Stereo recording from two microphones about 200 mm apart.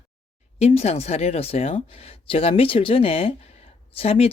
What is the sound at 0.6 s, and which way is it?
Speech, 30° left (ahead or behind).